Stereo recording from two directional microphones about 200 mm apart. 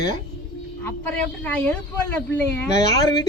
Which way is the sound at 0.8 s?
5° left (ahead or behind).